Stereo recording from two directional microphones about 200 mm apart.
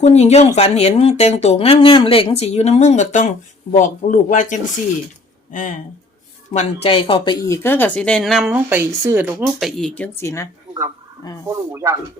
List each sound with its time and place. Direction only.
0.0 s speech: 35° left (ahead or behind)
6.8 s speech: 25° left (ahead or behind)
11.4 s speech: 15° right (ahead or behind)